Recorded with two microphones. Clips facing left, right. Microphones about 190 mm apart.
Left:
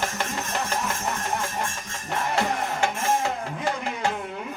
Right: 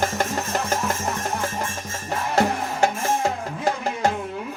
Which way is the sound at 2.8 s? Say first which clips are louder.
Right 6 dB; 40° right (ahead or behind).